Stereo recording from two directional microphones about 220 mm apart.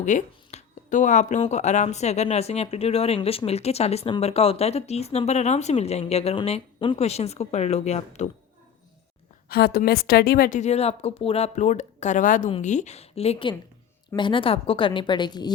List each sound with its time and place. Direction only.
0.0 s speech: 35° left (ahead or behind)
9.5 s a woman's voice: 45° left (ahead or behind); by 15.5 s 20° left (ahead or behind)